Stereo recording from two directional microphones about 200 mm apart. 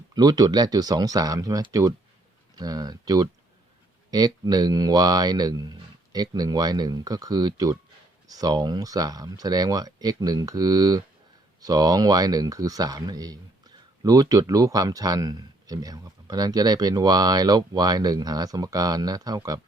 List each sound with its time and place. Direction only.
0.1 s speech: 20° right (ahead or behind)